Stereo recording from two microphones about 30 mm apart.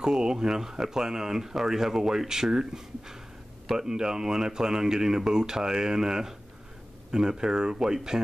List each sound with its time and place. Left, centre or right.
0.0 s speech: right